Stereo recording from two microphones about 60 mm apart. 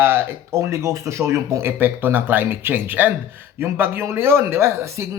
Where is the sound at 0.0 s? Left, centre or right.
Right.